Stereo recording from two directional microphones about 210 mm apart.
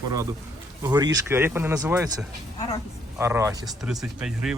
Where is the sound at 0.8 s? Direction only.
20° right (ahead or behind).